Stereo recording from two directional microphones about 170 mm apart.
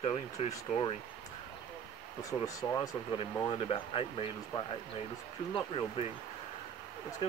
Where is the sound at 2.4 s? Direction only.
20° left (ahead or behind).